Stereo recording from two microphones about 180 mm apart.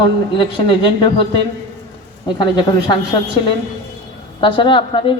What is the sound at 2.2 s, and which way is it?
A woman's voice, 25° left (ahead or behind).